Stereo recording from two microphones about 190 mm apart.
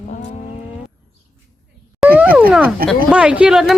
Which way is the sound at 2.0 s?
10° right (ahead or behind).